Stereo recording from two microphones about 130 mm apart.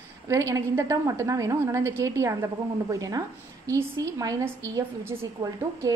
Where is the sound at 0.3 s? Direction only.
25° right (ahead or behind).